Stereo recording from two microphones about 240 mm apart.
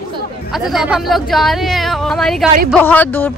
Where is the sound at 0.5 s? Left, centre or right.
Centre.